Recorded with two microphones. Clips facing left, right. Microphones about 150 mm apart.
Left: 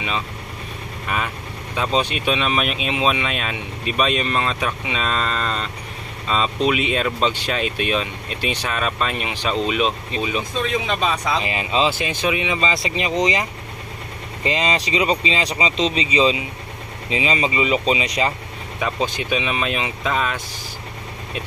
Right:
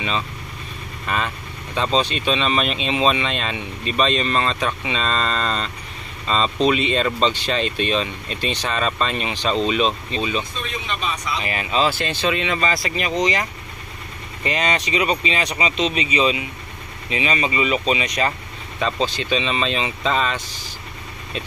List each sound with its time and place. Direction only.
1.0 s vehicle: 10° left (ahead or behind)
1.8 s speech: 10° left (ahead or behind)
11.4 s speech: 20° left (ahead or behind)
18.8 s speech: 10° left (ahead or behind)